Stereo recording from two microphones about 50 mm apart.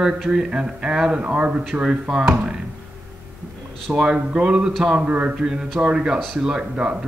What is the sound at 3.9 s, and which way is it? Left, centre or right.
A man's voice, centre.